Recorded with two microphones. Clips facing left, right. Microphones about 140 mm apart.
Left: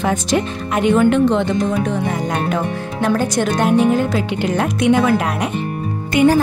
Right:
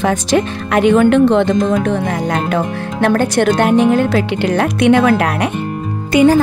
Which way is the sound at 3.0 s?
65° right (ahead or behind).